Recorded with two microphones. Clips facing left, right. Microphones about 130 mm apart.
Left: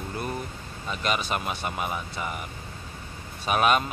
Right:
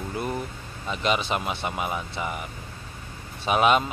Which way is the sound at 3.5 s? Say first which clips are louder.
Right 2 dB; 20° right (ahead or behind).